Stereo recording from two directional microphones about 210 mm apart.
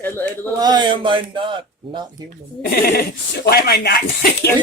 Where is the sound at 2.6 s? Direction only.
45° left (ahead or behind).